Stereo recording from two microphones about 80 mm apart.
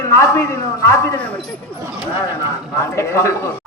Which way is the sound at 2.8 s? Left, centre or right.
Left.